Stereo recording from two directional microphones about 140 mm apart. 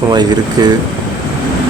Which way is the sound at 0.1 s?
30° right (ahead or behind).